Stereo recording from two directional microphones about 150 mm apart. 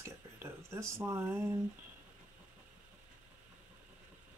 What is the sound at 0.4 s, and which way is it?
Speech, 20° right (ahead or behind).